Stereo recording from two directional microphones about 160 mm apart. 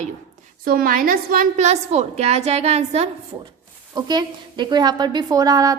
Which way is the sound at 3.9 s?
25° right (ahead or behind).